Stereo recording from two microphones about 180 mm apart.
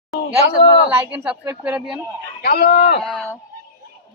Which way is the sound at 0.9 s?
10° right (ahead or behind).